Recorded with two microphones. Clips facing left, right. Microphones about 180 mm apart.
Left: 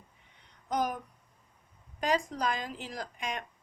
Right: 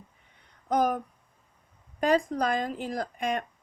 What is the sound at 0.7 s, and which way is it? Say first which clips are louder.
Speech: right 6 dB; 55° right (ahead or behind).